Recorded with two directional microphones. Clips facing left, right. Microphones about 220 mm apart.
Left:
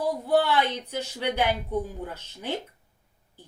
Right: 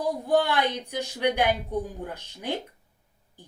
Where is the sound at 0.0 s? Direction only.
15° right (ahead or behind).